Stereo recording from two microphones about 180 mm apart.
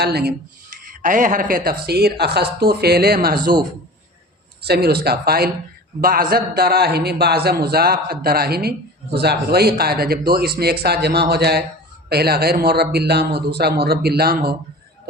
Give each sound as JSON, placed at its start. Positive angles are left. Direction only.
{"t": 0.0, "sound": "a man's voice", "side_deg": -60}
{"t": 0.9, "sound": "a man's voice", "side_deg": -50}
{"t": 4.6, "sound": "a man's voice", "side_deg": -60}